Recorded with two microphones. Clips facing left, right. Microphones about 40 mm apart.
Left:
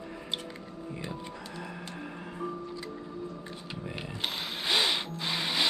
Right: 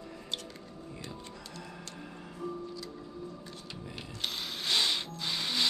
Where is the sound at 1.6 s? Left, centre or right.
Left.